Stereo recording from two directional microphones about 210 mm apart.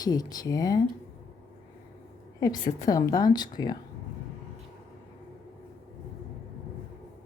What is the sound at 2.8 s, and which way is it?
Speech, 15° left (ahead or behind).